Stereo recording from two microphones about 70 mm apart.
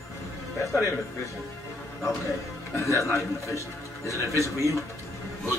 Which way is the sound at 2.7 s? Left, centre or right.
Left.